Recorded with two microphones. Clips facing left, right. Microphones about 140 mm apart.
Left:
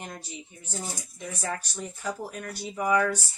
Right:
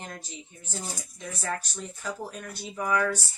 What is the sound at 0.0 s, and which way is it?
Speech, 15° left (ahead or behind).